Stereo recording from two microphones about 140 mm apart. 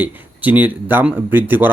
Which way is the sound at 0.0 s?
10° right (ahead or behind).